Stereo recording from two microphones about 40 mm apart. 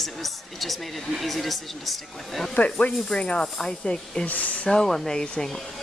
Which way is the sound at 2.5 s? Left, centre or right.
Left.